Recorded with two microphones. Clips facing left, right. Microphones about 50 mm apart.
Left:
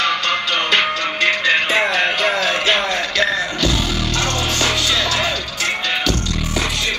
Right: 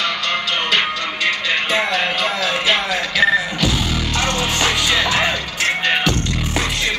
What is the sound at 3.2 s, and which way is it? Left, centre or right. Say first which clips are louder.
Music: right 4 dB; centre.